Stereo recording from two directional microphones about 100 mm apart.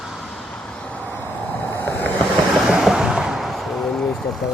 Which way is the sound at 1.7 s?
20° left (ahead or behind).